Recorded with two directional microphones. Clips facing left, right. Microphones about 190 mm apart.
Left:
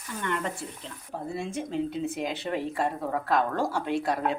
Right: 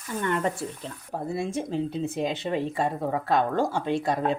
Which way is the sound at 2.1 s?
25° right (ahead or behind).